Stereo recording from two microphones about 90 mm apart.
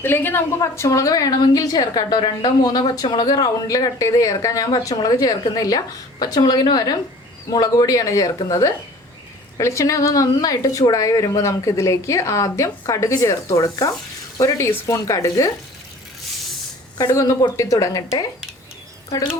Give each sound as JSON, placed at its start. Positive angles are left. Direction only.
{"t": 0.0, "sound": "a woman's voice", "side_deg": 25}
{"t": 0.6, "sound": "a woman's voice", "side_deg": 35}
{"t": 17.0, "sound": "speech", "side_deg": 35}